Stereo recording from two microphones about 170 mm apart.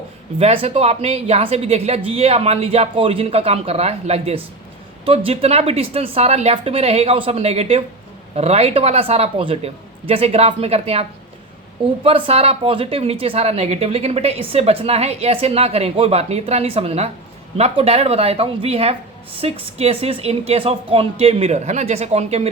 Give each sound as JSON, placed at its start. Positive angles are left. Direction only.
{"t": 0.3, "sound": "a woman's voice", "side_deg": -35}
{"t": 12.0, "sound": "a woman's voice", "side_deg": -35}